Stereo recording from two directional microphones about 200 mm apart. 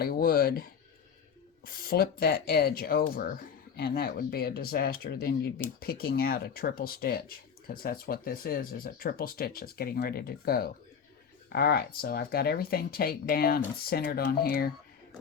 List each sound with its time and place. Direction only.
0.0 s speech: 50° left (ahead or behind)